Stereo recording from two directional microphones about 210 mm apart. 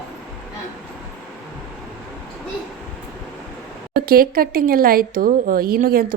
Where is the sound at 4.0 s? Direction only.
45° right (ahead or behind).